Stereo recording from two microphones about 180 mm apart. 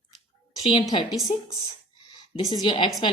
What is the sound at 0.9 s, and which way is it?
Speech, 25° left (ahead or behind).